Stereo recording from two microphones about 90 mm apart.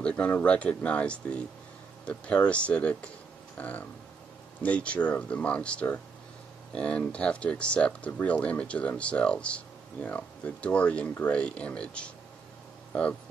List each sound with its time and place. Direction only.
0.0 s speech: 15° left (ahead or behind)